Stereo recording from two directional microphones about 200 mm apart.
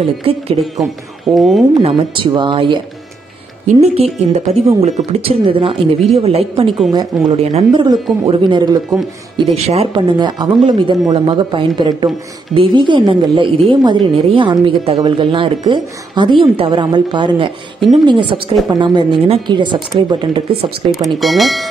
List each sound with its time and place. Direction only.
0.0 s a woman's voice: 30° right (ahead or behind)
0.7 s speech: centre (ahead or behind)
1.7 s a woman's voice: 25° right (ahead or behind)
9.5 s a woman's voice: 30° right (ahead or behind)
21.2 s speech: centre (ahead or behind)